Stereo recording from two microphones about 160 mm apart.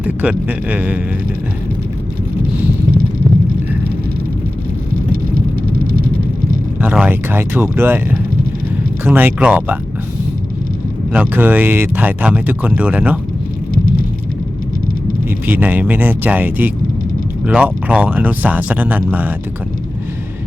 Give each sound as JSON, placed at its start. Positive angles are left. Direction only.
{"t": 0.0, "sound": "speech", "side_deg": -10}
{"t": 5.7, "sound": "vehicle", "side_deg": -65}
{"t": 6.8, "sound": "speech", "side_deg": -10}
{"t": 9.0, "sound": "speech", "side_deg": -10}
{"t": 11.1, "sound": "speech", "side_deg": -10}
{"t": 15.4, "sound": "speech", "side_deg": -10}